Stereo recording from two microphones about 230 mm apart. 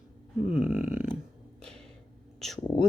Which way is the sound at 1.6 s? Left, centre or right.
Centre.